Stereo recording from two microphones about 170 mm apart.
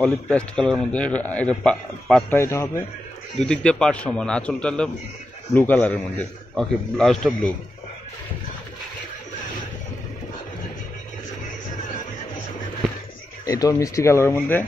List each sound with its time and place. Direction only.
0.0 s a man's voice: 5° left (ahead or behind)
2.3 s a man's voice: 15° left (ahead or behind)
3.3 s a man's voice: 5° left (ahead or behind)
13.5 s a man's voice: 20° left (ahead or behind)